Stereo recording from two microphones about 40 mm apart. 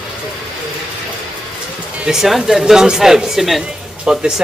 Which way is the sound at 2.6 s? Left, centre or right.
Centre.